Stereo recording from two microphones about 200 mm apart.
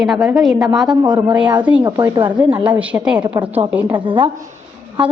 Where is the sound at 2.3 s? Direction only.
5° right (ahead or behind).